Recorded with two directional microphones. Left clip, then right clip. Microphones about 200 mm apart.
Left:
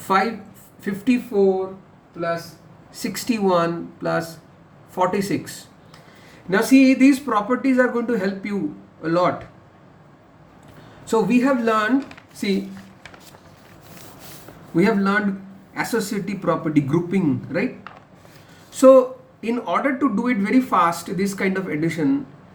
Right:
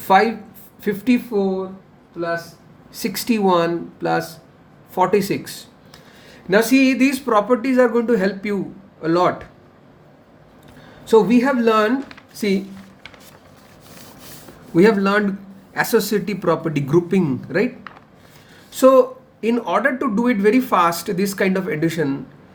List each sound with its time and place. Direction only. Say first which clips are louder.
0.8 s speech: right 3 dB; 35° right (ahead or behind)
3.0 s speech: right 3 dB; 35° right (ahead or behind)
11.1 s speech: right 4 dB; 35° right (ahead or behind)
14.8 s speech: right 4 dB; 45° right (ahead or behind)
18.7 s speech: even; 40° right (ahead or behind)